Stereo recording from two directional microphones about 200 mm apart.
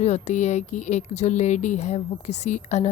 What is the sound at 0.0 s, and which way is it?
Speech, 35° left (ahead or behind).